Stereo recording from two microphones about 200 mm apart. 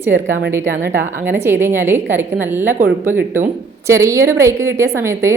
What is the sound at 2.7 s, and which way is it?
Speech, 40° right (ahead or behind).